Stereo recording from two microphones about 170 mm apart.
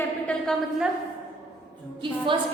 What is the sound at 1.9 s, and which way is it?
Speech, 30° right (ahead or behind).